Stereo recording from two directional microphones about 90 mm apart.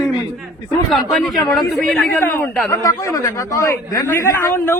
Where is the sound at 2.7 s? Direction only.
40° left (ahead or behind).